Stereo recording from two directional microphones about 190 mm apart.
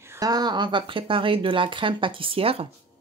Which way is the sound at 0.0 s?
15° right (ahead or behind).